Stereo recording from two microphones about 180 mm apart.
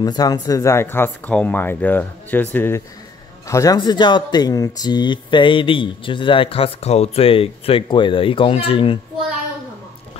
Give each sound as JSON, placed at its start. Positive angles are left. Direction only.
{"t": 0.0, "sound": "speech", "side_deg": 20}